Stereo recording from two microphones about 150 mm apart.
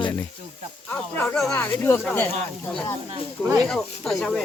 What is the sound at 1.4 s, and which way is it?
Speech, 10° left (ahead or behind).